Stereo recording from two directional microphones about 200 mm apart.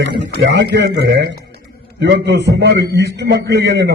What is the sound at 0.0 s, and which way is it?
A man's voice, 60° right (ahead or behind).